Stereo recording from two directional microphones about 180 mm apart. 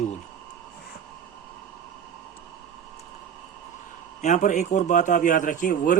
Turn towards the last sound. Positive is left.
turn(degrees=45)  # may be behind; listen again after turning